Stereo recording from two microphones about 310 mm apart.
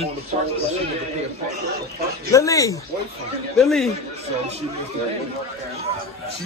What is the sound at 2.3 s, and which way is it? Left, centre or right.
A man's voice, centre.